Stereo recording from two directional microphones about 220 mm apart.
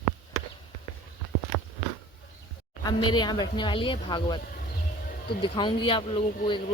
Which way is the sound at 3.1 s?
20° left (ahead or behind).